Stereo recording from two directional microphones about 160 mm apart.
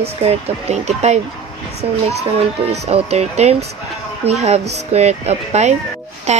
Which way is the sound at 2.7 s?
40° right (ahead or behind).